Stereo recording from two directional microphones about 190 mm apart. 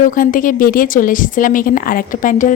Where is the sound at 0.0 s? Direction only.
45° left (ahead or behind).